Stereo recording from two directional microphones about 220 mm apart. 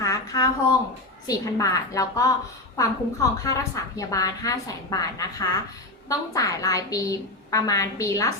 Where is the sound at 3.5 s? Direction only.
15° left (ahead or behind).